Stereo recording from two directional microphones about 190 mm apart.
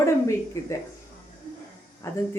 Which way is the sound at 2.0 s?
15° left (ahead or behind).